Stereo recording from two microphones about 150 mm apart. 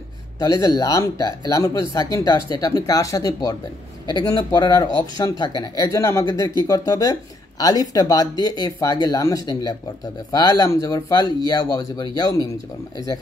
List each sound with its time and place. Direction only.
0.4 s speech: 25° left (ahead or behind)